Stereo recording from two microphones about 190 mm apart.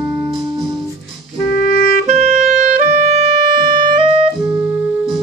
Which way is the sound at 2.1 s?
35° right (ahead or behind).